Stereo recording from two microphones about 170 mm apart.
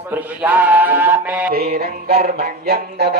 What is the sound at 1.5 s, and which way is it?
Music, 65° right (ahead or behind).